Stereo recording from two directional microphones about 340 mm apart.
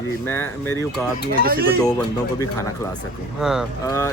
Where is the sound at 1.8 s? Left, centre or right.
Centre.